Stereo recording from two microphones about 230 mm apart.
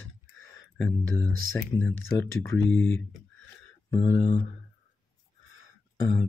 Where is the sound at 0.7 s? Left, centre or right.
Centre.